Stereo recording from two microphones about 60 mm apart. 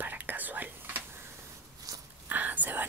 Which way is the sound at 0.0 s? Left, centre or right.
Right.